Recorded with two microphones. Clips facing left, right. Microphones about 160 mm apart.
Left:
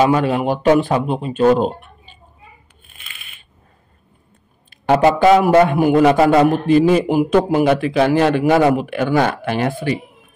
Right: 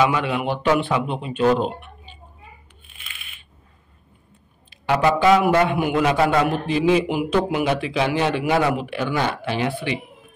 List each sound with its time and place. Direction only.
0.0 s speech: 40° left (ahead or behind)
2.9 s a sound: 45° left (ahead or behind)
4.6 s a man's voice: 50° left (ahead or behind)